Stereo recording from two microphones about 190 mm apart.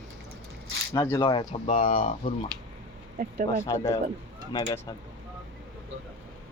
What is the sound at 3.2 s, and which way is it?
Speech, 45° right (ahead or behind).